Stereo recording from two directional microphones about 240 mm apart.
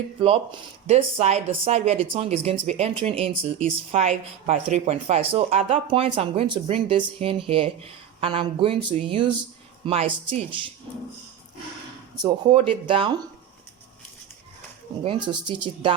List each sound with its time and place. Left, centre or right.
0.2 s a woman's voice: right
12.2 s a woman's voice: right
15.0 s a woman's voice: centre